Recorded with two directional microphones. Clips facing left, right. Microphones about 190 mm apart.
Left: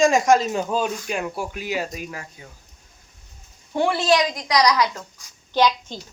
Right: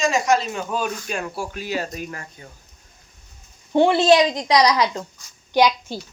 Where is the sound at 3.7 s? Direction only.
25° right (ahead or behind).